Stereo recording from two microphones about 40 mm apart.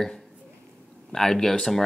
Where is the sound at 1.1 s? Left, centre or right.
Centre.